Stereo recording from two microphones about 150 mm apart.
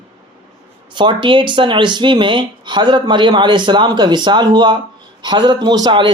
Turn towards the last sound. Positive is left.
turn(degrees=-30)  # may be behind; listen again after turning